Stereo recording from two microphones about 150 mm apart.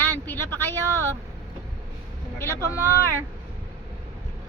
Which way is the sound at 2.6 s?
20° right (ahead or behind).